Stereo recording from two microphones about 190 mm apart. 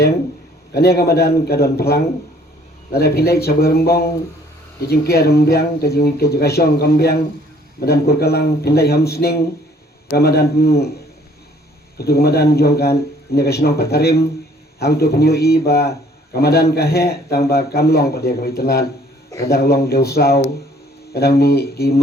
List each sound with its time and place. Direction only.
0.7 s speech: 55° left (ahead or behind)
11.9 s speech: 55° left (ahead or behind)